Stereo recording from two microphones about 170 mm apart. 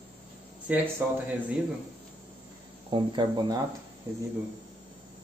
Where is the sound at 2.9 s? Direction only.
25° right (ahead or behind).